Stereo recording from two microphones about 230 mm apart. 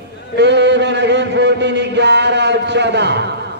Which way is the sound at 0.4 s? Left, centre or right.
Right.